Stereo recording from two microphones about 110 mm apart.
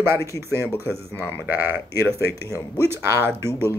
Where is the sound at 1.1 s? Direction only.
20° left (ahead or behind).